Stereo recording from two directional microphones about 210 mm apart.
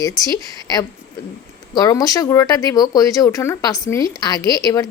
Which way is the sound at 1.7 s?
15° left (ahead or behind).